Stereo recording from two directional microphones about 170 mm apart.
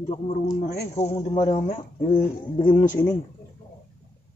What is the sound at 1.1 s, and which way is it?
Speech, 30° left (ahead or behind).